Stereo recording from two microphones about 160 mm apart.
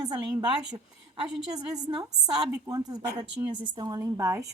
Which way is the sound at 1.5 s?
25° right (ahead or behind).